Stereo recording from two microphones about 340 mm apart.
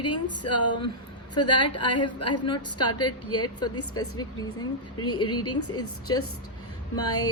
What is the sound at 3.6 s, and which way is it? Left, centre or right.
A woman's voice, centre.